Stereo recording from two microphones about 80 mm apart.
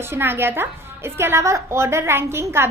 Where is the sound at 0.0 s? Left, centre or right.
Right.